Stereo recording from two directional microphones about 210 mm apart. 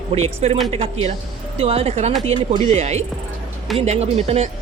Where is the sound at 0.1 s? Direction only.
30° right (ahead or behind).